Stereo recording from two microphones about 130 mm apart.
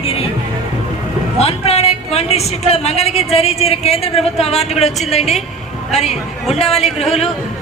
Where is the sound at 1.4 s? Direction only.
55° left (ahead or behind).